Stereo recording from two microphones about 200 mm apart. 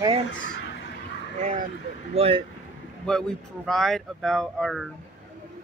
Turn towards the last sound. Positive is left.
turn(degrees=0)  # may be behind; listen again after turning